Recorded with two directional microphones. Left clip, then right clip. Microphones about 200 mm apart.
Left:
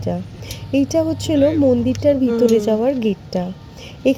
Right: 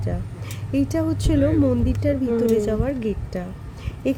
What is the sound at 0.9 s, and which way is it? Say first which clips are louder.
A woman's voice: left 5 dB; 15° left (ahead or behind).